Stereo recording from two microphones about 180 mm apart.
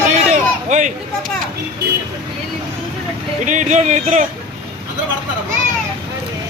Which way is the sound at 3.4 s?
45° right (ahead or behind).